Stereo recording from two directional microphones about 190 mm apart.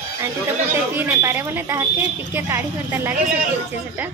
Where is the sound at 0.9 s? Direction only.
10° right (ahead or behind).